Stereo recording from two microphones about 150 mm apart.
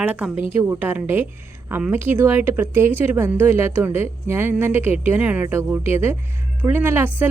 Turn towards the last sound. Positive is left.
turn(degrees=-15)  # may be behind; listen again after turning